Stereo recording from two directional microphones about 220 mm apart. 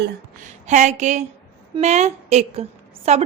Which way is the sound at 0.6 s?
35° right (ahead or behind).